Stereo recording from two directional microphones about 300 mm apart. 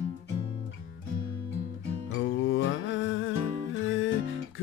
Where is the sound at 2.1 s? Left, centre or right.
Left.